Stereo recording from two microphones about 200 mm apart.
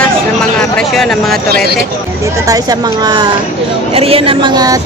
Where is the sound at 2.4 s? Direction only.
20° right (ahead or behind).